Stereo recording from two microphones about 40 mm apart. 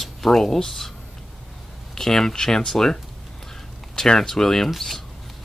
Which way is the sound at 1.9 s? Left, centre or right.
Centre.